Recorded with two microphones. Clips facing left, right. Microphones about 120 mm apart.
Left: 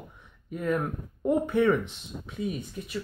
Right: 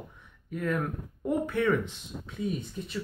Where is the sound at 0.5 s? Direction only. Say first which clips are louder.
Left 2 dB; 20° left (ahead or behind).